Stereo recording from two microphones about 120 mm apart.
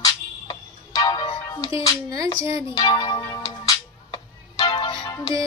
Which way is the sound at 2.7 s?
40° left (ahead or behind).